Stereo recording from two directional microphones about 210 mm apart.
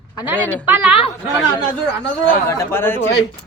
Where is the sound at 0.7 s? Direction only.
10° right (ahead or behind).